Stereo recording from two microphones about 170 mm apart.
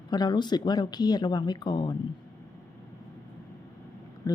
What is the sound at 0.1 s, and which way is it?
Speech, 25° left (ahead or behind).